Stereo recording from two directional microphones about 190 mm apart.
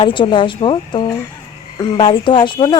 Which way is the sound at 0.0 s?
25° left (ahead or behind).